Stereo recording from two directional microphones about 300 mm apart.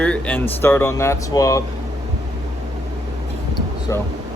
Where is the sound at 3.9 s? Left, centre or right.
Centre.